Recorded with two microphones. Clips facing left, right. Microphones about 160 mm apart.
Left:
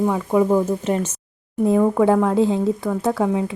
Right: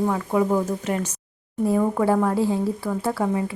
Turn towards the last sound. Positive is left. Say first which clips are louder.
# left 4 dB
turn(degrees=20)  # may be behind; listen again after turning